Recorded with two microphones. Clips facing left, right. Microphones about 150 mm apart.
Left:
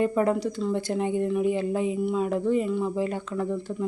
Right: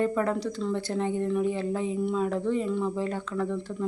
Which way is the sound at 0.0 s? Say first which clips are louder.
Left 3 dB; 15° left (ahead or behind).